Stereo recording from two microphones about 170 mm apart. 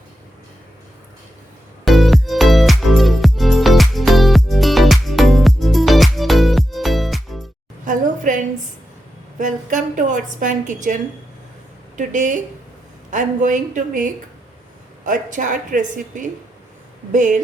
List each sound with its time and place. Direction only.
1.8 s music: centre (ahead or behind)
7.9 s a sound: 50° right (ahead or behind)
9.4 s a woman's voice: 50° right (ahead or behind)
11.9 s a woman's voice: 50° right (ahead or behind)